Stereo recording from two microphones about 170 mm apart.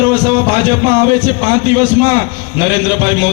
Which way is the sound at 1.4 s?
50° right (ahead or behind).